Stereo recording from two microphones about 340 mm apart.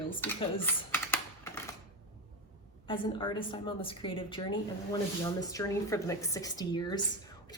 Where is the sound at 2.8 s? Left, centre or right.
Centre.